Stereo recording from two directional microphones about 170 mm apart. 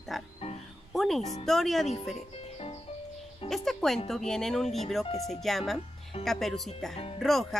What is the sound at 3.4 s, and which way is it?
Speech, centre (ahead or behind).